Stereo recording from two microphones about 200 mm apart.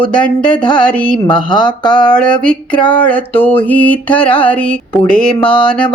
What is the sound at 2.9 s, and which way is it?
Music, 5° left (ahead or behind).